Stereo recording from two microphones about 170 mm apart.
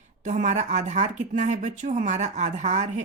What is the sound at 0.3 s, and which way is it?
Speech, 45° right (ahead or behind).